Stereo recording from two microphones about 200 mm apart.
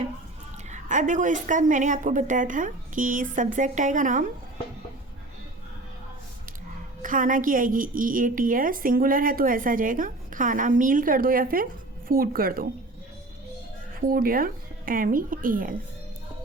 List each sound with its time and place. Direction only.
0.7 s a woman's voice: 40° right (ahead or behind)
7.0 s a woman's voice: 40° right (ahead or behind)
14.1 s a woman's voice: 45° right (ahead or behind)